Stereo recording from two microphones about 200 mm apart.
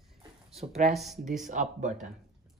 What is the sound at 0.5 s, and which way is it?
Speech, 35° right (ahead or behind).